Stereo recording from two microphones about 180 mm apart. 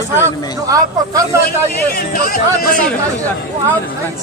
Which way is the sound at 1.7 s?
55° left (ahead or behind).